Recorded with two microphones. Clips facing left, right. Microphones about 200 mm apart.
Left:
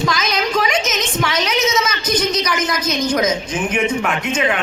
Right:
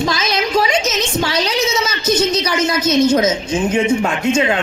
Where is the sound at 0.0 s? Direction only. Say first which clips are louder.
Right 1 dB; 30° right (ahead or behind).